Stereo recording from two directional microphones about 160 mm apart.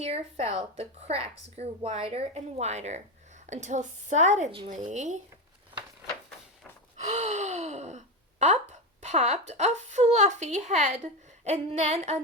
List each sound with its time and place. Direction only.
0.0 s a woman's voice: 40° right (ahead or behind)
6.9 s gasp: 45° right (ahead or behind)
9.0 s a woman's voice: 45° right (ahead or behind)